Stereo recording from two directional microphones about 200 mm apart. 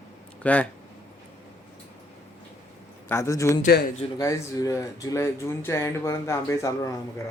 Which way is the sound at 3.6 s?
50° left (ahead or behind).